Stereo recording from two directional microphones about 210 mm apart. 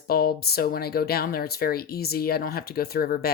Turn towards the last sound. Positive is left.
turn(degrees=45)  # may be behind; listen again after turning